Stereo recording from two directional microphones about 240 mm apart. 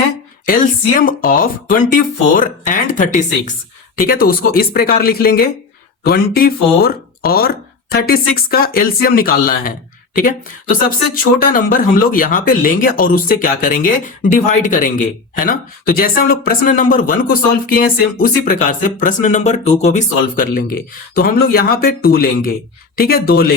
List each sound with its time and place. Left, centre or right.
0.4 s speech: left